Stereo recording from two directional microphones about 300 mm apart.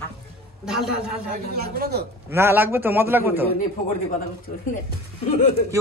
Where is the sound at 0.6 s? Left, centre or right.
Centre.